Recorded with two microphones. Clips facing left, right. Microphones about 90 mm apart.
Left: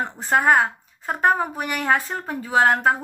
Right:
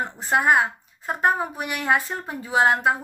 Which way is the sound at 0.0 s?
40° left (ahead or behind).